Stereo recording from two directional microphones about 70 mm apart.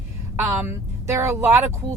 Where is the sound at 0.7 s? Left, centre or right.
Right.